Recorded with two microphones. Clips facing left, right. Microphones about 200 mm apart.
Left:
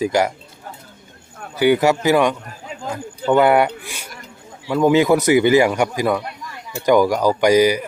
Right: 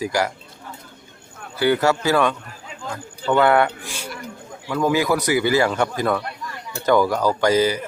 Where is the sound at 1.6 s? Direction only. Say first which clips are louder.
Left 3 dB; 15° left (ahead or behind).